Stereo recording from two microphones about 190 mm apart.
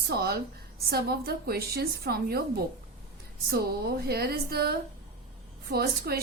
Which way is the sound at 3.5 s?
55° right (ahead or behind).